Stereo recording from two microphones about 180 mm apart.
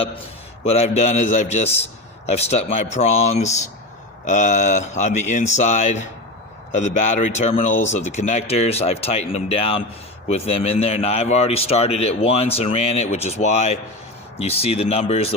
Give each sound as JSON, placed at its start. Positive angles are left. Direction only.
{"t": 0.6, "sound": "a man's voice", "side_deg": 35}
{"t": 7.3, "sound": "a man's voice", "side_deg": 40}